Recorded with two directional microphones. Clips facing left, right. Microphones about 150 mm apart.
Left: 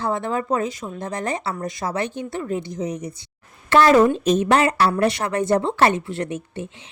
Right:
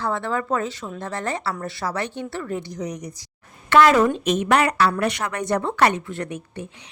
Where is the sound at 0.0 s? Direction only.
20° left (ahead or behind).